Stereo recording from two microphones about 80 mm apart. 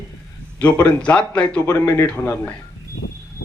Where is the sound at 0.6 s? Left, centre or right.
Centre.